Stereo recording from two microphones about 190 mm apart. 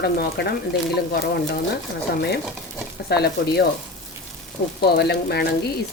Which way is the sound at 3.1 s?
60° left (ahead or behind).